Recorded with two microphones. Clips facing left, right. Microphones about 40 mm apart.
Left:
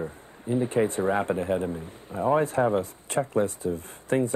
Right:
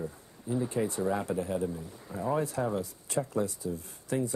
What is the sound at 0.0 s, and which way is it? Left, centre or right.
Speech, left.